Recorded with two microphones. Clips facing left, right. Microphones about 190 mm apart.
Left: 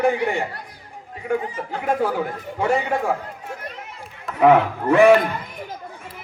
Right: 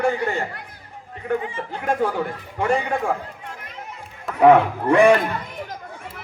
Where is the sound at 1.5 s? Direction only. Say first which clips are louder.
Left 1 dB; 40° left (ahead or behind).